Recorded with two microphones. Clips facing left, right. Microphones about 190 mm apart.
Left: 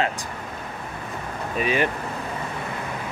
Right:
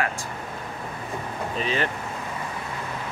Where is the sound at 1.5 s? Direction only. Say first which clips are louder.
Left 4 dB; 15° left (ahead or behind).